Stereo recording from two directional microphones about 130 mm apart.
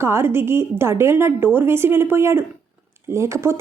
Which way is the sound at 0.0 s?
20° right (ahead or behind).